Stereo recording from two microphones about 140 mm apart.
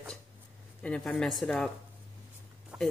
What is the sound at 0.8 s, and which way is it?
Speech, 5° left (ahead or behind).